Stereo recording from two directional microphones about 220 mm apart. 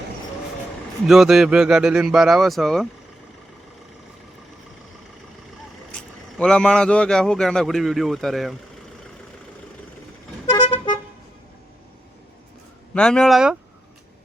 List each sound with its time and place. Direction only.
1.0 s speech: centre (ahead or behind)
5.9 s speech: 5° left (ahead or behind)
10.5 s vehicle: 20° left (ahead or behind)
12.9 s speech: 5° left (ahead or behind)